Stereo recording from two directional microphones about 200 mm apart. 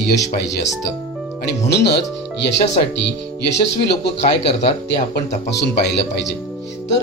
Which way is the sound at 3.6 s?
55° left (ahead or behind).